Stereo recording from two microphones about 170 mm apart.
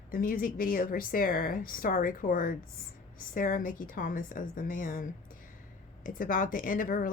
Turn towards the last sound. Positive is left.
turn(degrees=55)  # may be behind; listen again after turning